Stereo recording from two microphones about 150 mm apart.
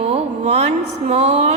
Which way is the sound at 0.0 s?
45° right (ahead or behind).